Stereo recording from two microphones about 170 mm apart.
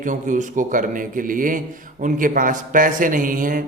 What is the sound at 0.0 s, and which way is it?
A man's voice, 50° right (ahead or behind).